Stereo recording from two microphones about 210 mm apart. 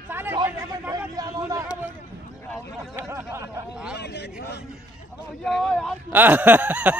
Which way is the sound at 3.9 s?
50° left (ahead or behind).